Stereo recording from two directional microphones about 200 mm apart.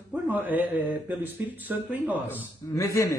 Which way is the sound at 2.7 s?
15° left (ahead or behind).